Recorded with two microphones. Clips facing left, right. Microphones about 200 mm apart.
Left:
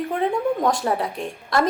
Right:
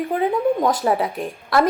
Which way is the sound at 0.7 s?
5° right (ahead or behind).